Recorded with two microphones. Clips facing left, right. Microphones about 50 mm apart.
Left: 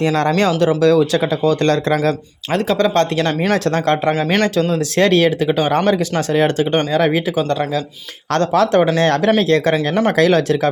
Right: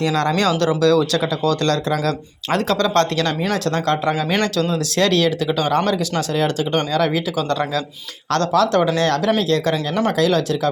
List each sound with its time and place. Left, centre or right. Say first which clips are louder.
0.0 s speech: left 3 dB; left
0.6 s speech: left 4 dB; left
3.5 s speech: left 4 dB; left